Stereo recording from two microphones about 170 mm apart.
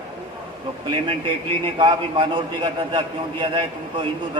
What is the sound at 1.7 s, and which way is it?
A man's voice, 25° right (ahead or behind).